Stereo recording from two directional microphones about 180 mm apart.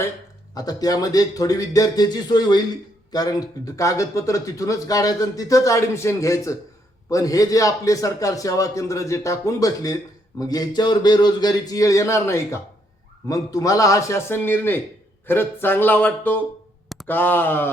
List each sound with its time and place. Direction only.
0.5 s a man's voice: 20° left (ahead or behind)